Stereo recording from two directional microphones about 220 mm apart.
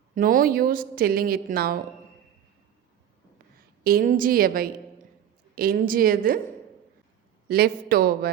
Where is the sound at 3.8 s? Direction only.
40° right (ahead or behind).